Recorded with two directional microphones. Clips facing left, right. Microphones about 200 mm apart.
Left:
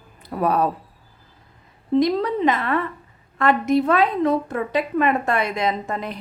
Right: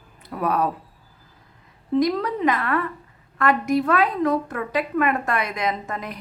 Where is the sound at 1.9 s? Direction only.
25° left (ahead or behind).